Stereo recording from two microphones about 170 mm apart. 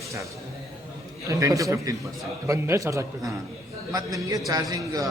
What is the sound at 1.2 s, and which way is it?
A man's voice, 20° right (ahead or behind).